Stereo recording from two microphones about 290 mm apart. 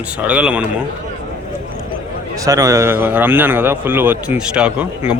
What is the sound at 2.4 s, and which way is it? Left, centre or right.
A man's voice, centre.